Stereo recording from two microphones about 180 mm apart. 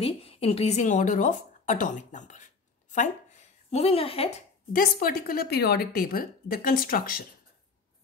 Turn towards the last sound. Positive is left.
turn(degrees=55)  # may be behind; listen again after turning